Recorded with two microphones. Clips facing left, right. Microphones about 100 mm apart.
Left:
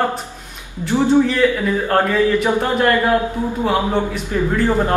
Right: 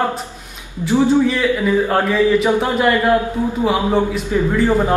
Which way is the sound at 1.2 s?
5° right (ahead or behind).